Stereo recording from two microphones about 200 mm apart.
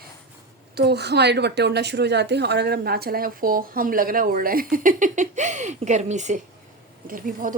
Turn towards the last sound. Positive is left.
turn(degrees=-45)  # may be behind; listen again after turning